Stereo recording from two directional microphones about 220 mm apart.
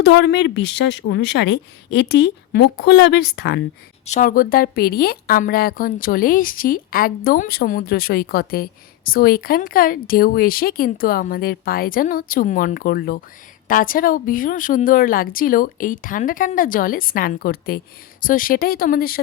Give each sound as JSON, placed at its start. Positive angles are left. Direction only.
{"t": 0.0, "sound": "a woman's voice", "side_deg": 50}
{"t": 4.0, "sound": "a woman's voice", "side_deg": 35}